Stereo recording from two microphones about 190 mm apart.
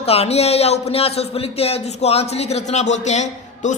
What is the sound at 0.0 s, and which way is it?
Speech, 30° left (ahead or behind).